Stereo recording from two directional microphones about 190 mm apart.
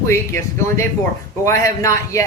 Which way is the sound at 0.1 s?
15° left (ahead or behind).